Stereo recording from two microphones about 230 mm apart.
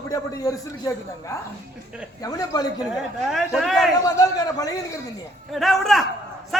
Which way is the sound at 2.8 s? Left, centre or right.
Centre.